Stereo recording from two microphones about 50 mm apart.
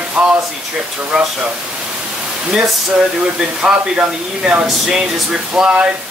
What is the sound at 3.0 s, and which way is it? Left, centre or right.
Speech, centre.